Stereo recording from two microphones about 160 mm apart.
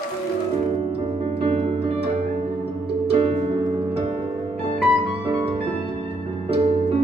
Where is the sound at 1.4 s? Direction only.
35° right (ahead or behind).